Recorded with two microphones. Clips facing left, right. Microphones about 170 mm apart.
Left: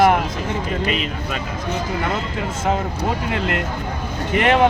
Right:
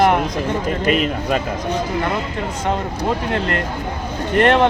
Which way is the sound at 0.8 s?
45° right (ahead or behind).